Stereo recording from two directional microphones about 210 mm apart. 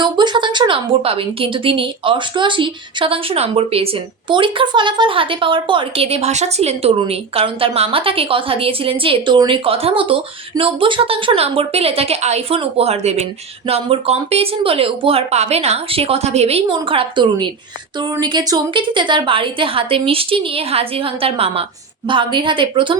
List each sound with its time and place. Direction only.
0.0 s a woman's voice: 20° right (ahead or behind)